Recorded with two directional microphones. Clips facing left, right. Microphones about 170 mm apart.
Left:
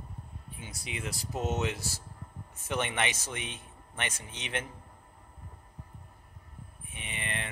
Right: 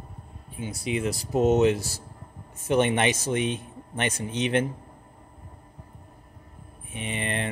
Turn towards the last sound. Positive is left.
turn(degrees=-35)  # may be behind; listen again after turning